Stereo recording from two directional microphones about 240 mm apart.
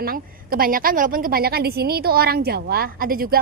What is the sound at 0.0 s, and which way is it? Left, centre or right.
A woman's voice, right.